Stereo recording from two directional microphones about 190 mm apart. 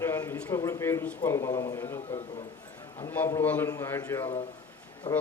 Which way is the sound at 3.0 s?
15° left (ahead or behind).